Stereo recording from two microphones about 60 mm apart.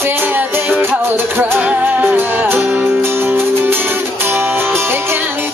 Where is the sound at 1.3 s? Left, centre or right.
Right.